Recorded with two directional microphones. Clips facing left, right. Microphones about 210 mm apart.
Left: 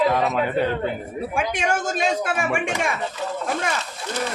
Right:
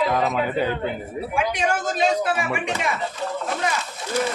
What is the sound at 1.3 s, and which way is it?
Speech, 50° left (ahead or behind).